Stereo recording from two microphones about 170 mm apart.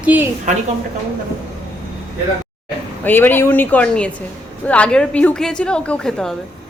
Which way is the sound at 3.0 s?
10° left (ahead or behind).